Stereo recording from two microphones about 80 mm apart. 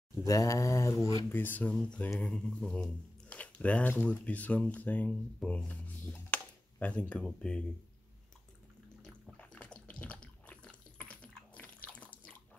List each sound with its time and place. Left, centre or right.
0.3 s speech: left
1.3 s speech: left
2.7 s a sound: centre
4.0 s speech: centre
5.7 s a sound: centre
7.2 s speech: centre
9.0 s bathtub: centre